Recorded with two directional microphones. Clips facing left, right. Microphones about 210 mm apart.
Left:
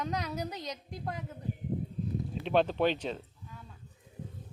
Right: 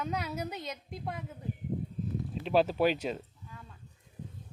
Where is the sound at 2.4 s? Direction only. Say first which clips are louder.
Right 1 dB; 5° right (ahead or behind).